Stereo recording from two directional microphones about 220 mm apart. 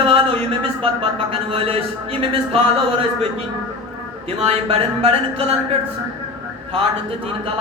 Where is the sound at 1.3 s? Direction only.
25° right (ahead or behind).